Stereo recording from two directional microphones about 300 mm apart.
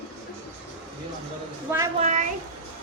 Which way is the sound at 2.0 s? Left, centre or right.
Right.